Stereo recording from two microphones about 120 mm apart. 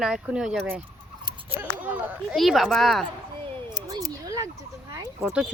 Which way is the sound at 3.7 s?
30° right (ahead or behind).